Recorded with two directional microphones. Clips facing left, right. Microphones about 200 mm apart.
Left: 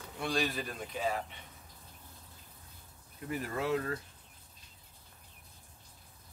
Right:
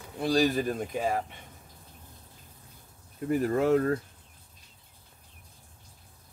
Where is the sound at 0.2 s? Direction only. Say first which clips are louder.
Right 9 dB; 40° right (ahead or behind).